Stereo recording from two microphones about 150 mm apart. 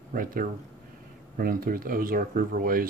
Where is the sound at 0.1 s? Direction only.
70° right (ahead or behind).